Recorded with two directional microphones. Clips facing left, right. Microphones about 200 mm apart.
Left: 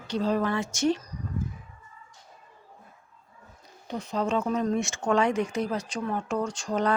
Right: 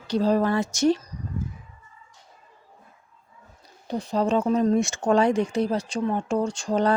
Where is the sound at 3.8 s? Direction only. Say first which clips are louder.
Right 5 dB; 35° right (ahead or behind).